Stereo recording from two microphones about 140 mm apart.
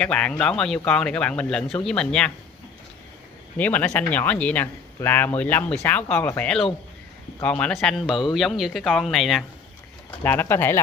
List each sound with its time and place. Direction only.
0.0 s speech: 10° left (ahead or behind)
3.5 s speech: 10° left (ahead or behind)
10.2 s speech: 15° left (ahead or behind)